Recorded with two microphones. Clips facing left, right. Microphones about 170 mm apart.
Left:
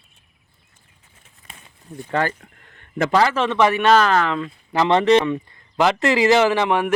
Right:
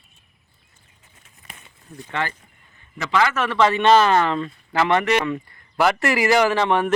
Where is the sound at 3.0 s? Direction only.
35° left (ahead or behind).